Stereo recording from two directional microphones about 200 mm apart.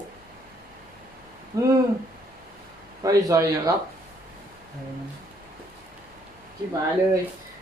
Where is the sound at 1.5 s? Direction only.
15° right (ahead or behind).